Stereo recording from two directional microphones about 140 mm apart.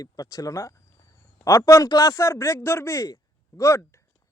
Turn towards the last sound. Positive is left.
turn(degrees=20)  # may be behind; listen again after turning